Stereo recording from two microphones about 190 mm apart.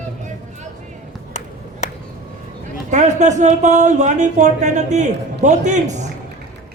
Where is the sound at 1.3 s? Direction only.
35° left (ahead or behind).